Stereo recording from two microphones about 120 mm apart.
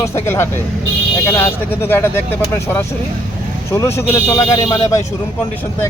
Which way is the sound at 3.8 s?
25° left (ahead or behind).